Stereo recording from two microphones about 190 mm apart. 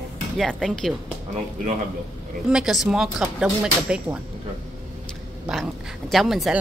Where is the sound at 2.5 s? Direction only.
Centre (ahead or behind).